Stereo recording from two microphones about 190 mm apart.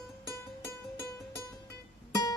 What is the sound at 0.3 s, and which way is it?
Music, 15° left (ahead or behind).